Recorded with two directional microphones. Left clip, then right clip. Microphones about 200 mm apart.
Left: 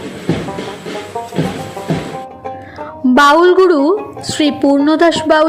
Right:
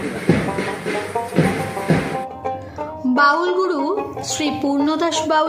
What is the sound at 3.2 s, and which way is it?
A woman's voice, 35° left (ahead or behind).